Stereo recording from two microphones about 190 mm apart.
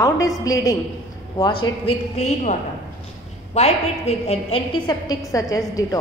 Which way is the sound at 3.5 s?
35° left (ahead or behind).